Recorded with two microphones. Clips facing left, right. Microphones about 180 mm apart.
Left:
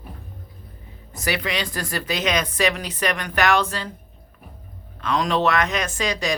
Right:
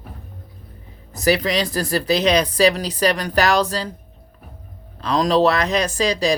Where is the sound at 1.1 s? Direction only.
35° right (ahead or behind).